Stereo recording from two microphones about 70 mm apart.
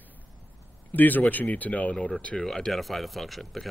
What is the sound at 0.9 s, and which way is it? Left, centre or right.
Speech, left.